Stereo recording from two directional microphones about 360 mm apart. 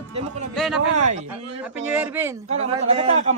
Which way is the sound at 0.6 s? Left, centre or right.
Centre.